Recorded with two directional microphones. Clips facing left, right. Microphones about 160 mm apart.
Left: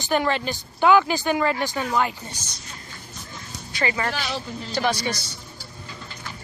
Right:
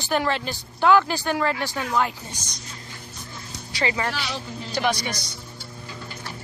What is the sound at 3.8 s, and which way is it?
Speech, 20° right (ahead or behind).